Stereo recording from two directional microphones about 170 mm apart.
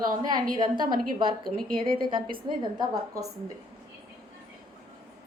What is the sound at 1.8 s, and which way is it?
A woman's voice, 30° right (ahead or behind).